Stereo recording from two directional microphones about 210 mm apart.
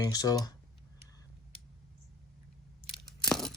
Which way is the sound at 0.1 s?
15° left (ahead or behind).